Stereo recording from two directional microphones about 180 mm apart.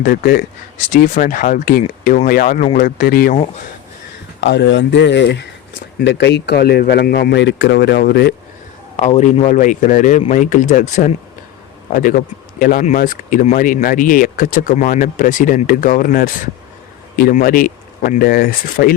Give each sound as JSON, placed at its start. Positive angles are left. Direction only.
{"t": 0.0, "sound": "speech", "side_deg": 55}
{"t": 4.4, "sound": "speech", "side_deg": 75}
{"t": 9.0, "sound": "speech", "side_deg": 40}